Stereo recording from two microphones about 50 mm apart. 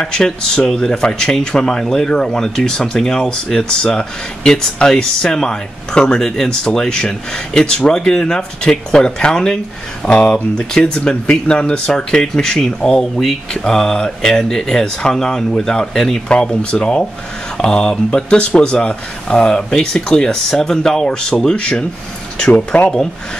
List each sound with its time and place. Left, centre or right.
0.0 s speech: centre